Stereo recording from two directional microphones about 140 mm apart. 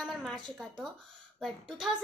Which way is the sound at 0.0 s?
Centre (ahead or behind).